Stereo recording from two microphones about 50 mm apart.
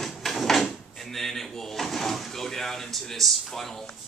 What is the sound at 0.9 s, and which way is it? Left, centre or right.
Speech, centre.